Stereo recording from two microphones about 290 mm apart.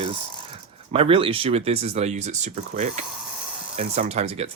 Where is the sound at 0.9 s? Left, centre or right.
Centre.